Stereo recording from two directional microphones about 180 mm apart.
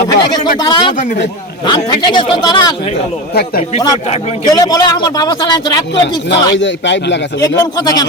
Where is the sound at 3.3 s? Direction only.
60° left (ahead or behind).